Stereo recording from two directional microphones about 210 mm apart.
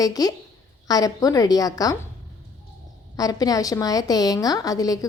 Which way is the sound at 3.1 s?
15° left (ahead or behind).